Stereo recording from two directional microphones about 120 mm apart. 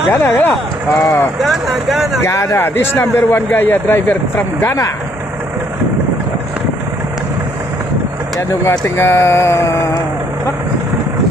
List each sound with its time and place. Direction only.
0.1 s a man's voice: 15° left (ahead or behind)
1.4 s speech: centre (ahead or behind)
2.2 s a man's voice: 25° left (ahead or behind)
8.4 s a man's voice: 25° left (ahead or behind)